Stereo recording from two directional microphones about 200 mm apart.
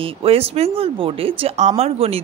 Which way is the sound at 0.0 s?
30° right (ahead or behind).